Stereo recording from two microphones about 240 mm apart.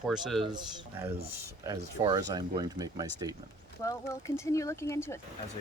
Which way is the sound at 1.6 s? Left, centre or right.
Centre.